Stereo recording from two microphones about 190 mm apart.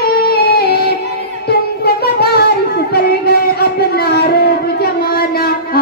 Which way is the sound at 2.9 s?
55° left (ahead or behind).